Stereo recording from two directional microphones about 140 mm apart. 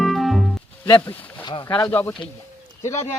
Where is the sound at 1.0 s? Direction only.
10° left (ahead or behind).